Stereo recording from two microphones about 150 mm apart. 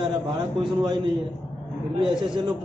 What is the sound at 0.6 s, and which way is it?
A man's voice, 30° right (ahead or behind).